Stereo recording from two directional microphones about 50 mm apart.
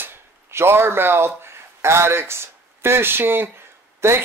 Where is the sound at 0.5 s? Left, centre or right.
Right.